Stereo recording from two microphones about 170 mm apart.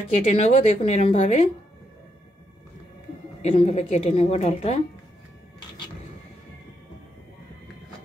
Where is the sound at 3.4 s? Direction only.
40° left (ahead or behind).